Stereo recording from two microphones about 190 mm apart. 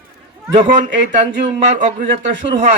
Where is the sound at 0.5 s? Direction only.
40° right (ahead or behind).